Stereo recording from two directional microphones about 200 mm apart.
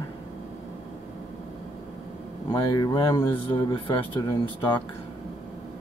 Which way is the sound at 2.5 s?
20° left (ahead or behind).